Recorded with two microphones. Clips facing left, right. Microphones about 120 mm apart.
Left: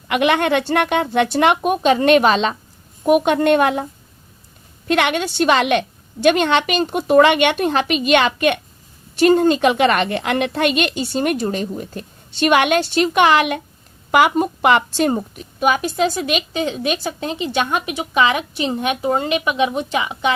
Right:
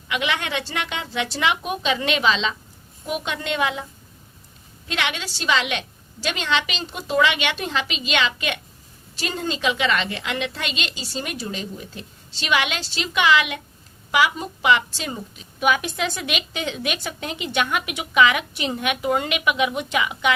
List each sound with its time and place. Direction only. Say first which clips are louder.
0.1 s a woman's voice: left 9 dB; 55° left (ahead or behind)
4.9 s a woman's voice: left 10 dB; 55° left (ahead or behind)
15.6 s speech: left 5 dB; 40° left (ahead or behind)